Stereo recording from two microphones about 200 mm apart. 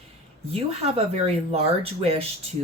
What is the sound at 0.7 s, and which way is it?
Speech, 30° right (ahead or behind).